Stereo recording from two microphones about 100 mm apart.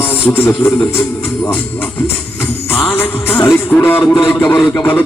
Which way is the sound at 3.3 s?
25° left (ahead or behind).